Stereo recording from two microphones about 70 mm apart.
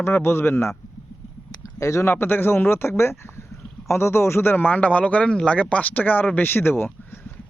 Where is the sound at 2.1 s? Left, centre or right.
Left.